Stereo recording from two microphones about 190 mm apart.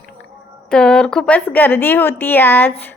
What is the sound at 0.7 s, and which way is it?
A woman's voice, 5° left (ahead or behind).